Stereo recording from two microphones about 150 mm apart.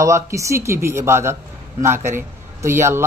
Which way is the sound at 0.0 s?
20° right (ahead or behind).